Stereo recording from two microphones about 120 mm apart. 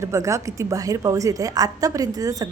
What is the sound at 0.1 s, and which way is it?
A woman's voice, 25° right (ahead or behind).